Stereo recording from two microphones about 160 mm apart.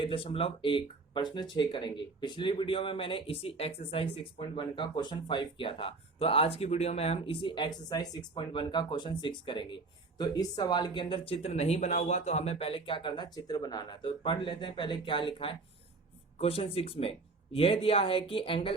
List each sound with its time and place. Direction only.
0.0 s speech: 35° left (ahead or behind)